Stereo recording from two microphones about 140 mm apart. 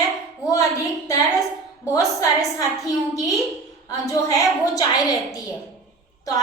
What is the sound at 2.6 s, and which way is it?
A woman's voice, 25° left (ahead or behind).